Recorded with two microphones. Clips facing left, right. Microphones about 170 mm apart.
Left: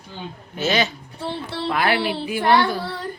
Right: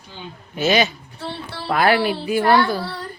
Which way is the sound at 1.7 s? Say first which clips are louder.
Right 5 dB; 40° right (ahead or behind).